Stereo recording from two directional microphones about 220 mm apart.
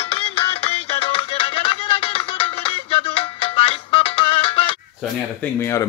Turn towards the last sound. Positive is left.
turn(degrees=15)  # may be behind; listen again after turning